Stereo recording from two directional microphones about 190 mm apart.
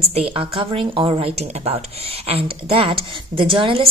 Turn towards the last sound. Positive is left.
turn(degrees=-25)  # may be behind; listen again after turning